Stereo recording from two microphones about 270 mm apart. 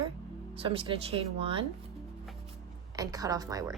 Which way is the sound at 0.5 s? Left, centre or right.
Right.